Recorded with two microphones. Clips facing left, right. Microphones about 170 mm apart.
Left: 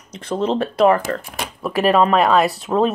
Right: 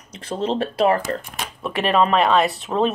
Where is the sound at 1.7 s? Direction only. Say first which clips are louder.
Left 3 dB; 40° left (ahead or behind).